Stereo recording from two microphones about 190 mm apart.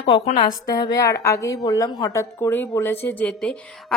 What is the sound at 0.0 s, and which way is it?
A woman's voice, 25° left (ahead or behind).